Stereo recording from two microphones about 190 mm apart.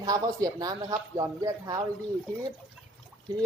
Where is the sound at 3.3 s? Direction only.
20° right (ahead or behind).